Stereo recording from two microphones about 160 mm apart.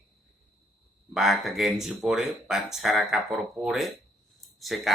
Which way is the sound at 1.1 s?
Centre (ahead or behind).